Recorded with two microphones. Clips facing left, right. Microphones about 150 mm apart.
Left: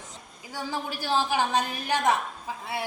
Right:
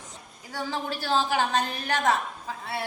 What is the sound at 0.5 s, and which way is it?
A woman's voice, 10° left (ahead or behind).